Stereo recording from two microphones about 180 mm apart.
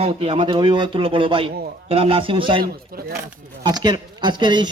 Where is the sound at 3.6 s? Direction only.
20° right (ahead or behind).